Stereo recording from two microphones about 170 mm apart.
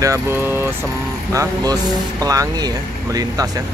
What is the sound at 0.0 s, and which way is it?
Speech, 15° right (ahead or behind).